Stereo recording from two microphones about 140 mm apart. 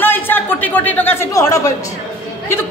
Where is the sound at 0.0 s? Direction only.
15° left (ahead or behind).